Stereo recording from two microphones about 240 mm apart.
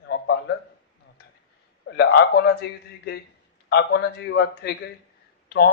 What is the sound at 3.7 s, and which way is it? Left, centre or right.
A man's voice, left.